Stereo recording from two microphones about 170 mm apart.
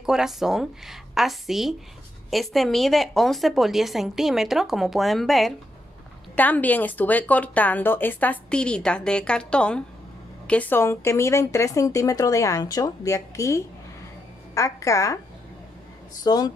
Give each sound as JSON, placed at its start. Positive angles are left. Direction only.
{"t": 0.0, "sound": "a woman's voice", "side_deg": -5}
{"t": 16.3, "sound": "speech", "side_deg": 25}